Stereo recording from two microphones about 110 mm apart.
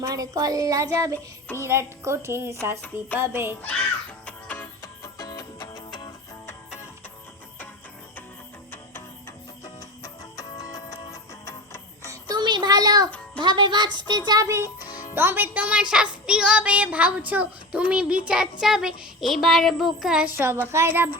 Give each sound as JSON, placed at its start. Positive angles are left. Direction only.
{"t": 0.0, "sound": "a sound", "side_deg": -35}
{"t": 1.5, "sound": "a woman's voice", "side_deg": -25}
{"t": 4.3, "sound": "music", "side_deg": 15}
{"t": 4.8, "sound": "music", "side_deg": 35}
{"t": 8.7, "sound": "music", "side_deg": 20}
{"t": 9.6, "sound": "music", "side_deg": 30}
{"t": 12.3, "sound": "a sound", "side_deg": -40}
{"t": 13.1, "sound": "music", "side_deg": 10}
{"t": 13.4, "sound": "music", "side_deg": -45}
{"t": 14.1, "sound": "a sound", "side_deg": -40}
{"t": 14.6, "sound": "music", "side_deg": 35}
{"t": 15.1, "sound": "a child's voice", "side_deg": -20}
{"t": 20.2, "sound": "a woman's voice", "side_deg": -20}